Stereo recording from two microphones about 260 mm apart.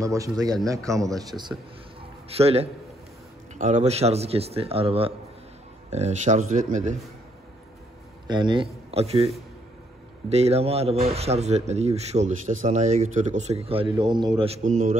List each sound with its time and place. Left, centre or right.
0.0 s speech: centre; by 7.0 s right
8.3 s a man's voice: centre
10.3 s speech: right